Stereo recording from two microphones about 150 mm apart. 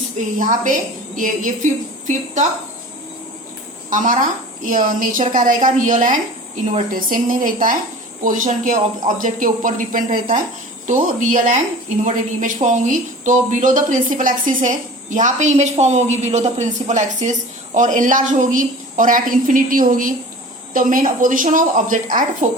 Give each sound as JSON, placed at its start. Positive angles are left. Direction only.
{"t": 0.3, "sound": "speech", "side_deg": -60}
{"t": 3.8, "sound": "speech", "side_deg": -60}